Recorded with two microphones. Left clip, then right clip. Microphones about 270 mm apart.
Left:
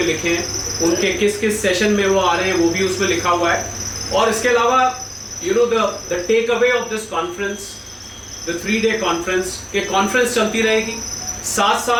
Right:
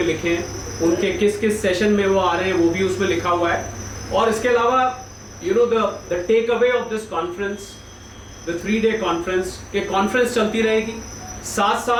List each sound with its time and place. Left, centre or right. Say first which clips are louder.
0.0 s speech: left 2 dB; centre